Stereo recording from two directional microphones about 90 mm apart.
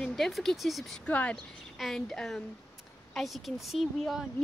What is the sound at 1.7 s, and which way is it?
Speech, 5° left (ahead or behind).